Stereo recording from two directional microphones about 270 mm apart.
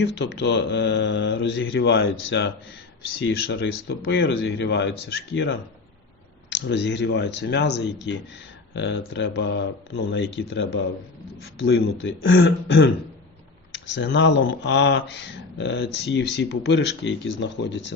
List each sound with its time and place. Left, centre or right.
0.0 s speech: left
6.7 s speech: left
13.9 s speech: left